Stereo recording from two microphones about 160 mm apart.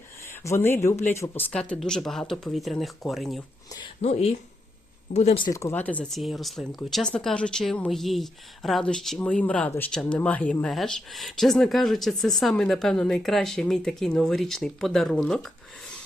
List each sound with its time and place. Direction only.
0.3 s speech: 15° left (ahead or behind); by 3.4 s centre (ahead or behind)
4.0 s speech: 40° left (ahead or behind)
5.5 s speech: 20° left (ahead or behind)